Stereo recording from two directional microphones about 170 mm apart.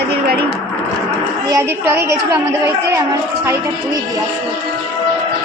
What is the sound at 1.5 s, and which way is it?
Speech, 15° right (ahead or behind).